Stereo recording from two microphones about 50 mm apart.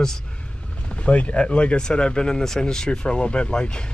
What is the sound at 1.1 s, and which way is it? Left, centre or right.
Speech, left.